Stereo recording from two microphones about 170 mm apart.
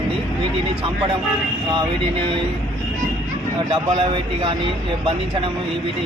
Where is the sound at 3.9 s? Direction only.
30° right (ahead or behind).